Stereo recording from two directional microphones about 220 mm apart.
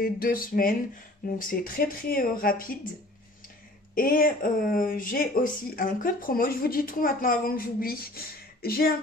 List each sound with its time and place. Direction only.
0.0 s speech: 40° left (ahead or behind)
3.9 s speech: 40° left (ahead or behind)